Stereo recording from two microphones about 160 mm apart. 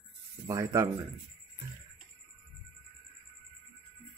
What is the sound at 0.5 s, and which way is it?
Speech, 20° right (ahead or behind).